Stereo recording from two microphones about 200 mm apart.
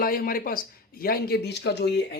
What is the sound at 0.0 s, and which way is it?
Speech, 45° left (ahead or behind).